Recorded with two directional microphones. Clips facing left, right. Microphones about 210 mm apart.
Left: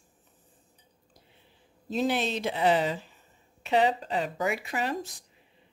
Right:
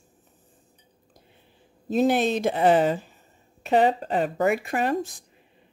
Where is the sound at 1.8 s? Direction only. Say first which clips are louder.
Right 7 dB; 50° right (ahead or behind).